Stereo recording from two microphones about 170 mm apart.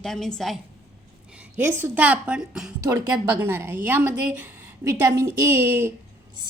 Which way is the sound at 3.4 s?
15° right (ahead or behind).